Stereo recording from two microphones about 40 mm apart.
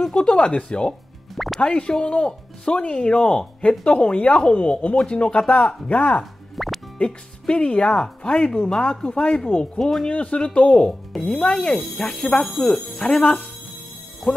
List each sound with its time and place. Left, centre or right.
0.1 s speech: left
1.3 s music: centre
1.6 s speech: left
6.5 s music: centre
7.0 s speech: left
9.8 s speech: centre
10.0 s speech: left
10.9 s speech: centre
12.4 s speech: centre
13.1 s speech: left
14.3 s speech: centre